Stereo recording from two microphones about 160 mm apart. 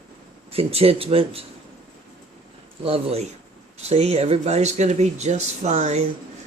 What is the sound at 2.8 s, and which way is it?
Speech, 40° right (ahead or behind).